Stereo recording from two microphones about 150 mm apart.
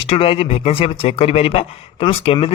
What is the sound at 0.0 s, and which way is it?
A man's voice, 40° left (ahead or behind).